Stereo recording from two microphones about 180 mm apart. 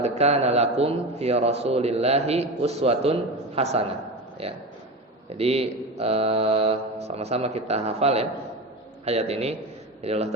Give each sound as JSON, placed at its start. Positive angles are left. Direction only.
{"t": 0.0, "sound": "a man's voice", "side_deg": -35}